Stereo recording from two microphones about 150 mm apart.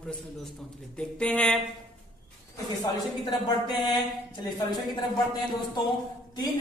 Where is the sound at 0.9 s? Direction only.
5° left (ahead or behind).